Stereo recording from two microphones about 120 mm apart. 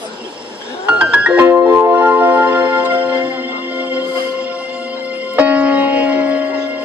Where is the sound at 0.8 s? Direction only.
10° right (ahead or behind).